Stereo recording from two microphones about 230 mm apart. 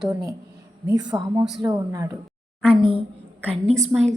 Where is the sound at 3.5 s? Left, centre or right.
Right.